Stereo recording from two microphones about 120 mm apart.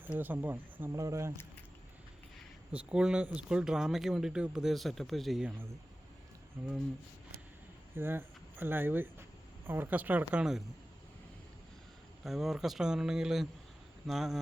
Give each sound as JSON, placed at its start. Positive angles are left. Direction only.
{"t": 0.0, "sound": "speech", "side_deg": -15}
{"t": 0.9, "sound": "speech", "side_deg": -25}
{"t": 2.7, "sound": "speech", "side_deg": -5}
{"t": 7.9, "sound": "speech", "side_deg": -20}
{"t": 12.2, "sound": "speech", "side_deg": -5}